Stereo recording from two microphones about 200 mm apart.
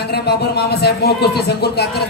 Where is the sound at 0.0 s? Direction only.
55° left (ahead or behind).